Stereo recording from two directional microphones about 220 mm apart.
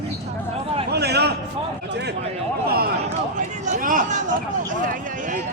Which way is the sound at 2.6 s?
45° right (ahead or behind).